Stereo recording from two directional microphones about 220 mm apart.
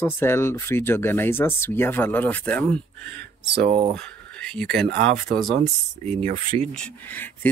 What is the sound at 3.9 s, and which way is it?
Speech, 5° left (ahead or behind).